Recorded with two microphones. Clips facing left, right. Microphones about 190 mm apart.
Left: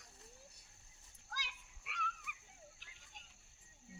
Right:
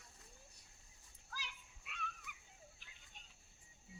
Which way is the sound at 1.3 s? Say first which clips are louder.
Left 2 dB; 75° left (ahead or behind).